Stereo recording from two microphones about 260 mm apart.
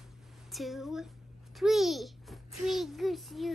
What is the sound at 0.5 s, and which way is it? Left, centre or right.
A child's voice, centre.